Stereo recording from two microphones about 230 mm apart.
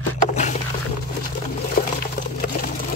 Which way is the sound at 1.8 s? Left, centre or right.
Left.